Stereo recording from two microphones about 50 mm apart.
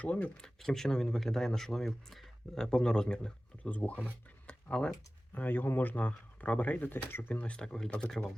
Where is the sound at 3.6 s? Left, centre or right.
Left.